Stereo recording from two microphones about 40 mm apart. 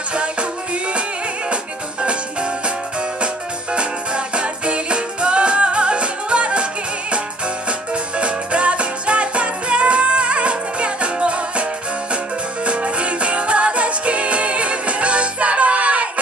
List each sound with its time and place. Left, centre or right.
0.1 s music: right
1.5 s music: right
3.7 s music: right
12.6 s music: right